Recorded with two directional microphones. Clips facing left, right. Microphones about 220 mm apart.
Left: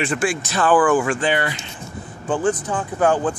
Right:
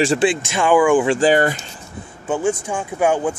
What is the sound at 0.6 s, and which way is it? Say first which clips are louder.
Speech: right 2 dB; 10° right (ahead or behind).